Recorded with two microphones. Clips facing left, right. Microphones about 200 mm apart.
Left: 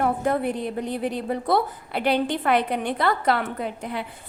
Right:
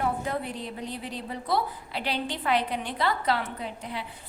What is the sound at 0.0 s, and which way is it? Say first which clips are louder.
A woman's voice: left 7 dB; 55° left (ahead or behind).